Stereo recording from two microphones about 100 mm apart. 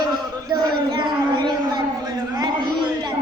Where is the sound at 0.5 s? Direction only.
45° right (ahead or behind).